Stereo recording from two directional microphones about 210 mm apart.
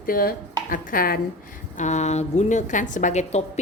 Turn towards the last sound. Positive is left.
turn(degrees=30)  # may be behind; listen again after turning